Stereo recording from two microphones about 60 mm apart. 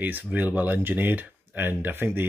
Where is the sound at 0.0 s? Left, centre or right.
Right.